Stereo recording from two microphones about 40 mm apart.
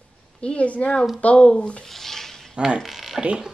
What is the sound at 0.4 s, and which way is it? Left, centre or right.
Speech, left.